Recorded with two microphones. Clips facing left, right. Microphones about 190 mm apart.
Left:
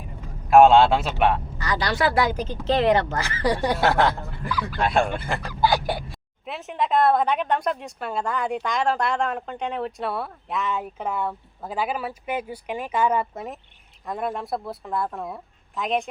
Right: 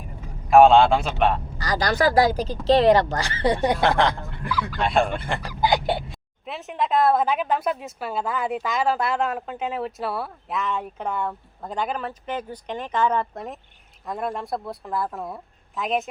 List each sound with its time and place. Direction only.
0.5 s a woman's voice: centre (ahead or behind)
1.5 s speech: 35° right (ahead or behind); by 3.8 s 20° right (ahead or behind)
3.8 s a woman's voice: 5° left (ahead or behind)
5.5 s a sound: 15° right (ahead or behind)
6.4 s a woman's voice: centre (ahead or behind)